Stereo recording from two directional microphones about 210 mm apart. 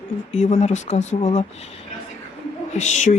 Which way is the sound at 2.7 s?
35° left (ahead or behind).